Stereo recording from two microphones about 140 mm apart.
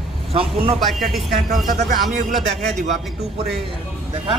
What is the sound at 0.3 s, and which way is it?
Speech, 45° right (ahead or behind).